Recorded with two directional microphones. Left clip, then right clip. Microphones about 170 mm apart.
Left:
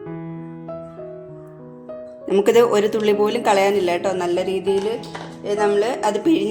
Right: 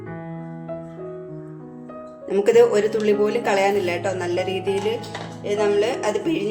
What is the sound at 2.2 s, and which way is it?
A woman's voice, 40° left (ahead or behind).